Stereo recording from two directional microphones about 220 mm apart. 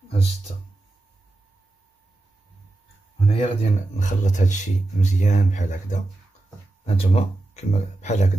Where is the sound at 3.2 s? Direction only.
25° left (ahead or behind).